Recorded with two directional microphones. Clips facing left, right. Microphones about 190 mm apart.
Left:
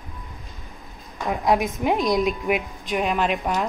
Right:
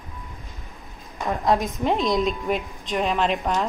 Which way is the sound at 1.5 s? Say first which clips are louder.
Left 2 dB; 10° left (ahead or behind).